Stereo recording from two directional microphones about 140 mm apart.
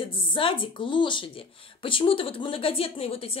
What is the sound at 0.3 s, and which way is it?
A woman's voice, 35° left (ahead or behind).